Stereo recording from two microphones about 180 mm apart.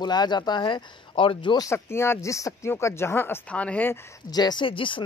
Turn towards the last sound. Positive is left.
turn(degrees=30)  # may be behind; listen again after turning